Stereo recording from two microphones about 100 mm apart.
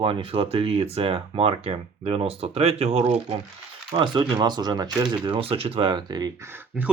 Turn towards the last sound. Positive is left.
turn(degrees=-25)  # may be behind; listen again after turning